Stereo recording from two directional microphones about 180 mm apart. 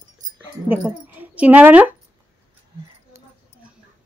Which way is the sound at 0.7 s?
10° right (ahead or behind).